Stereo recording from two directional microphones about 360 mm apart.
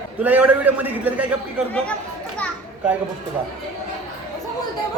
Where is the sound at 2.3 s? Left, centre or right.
Centre.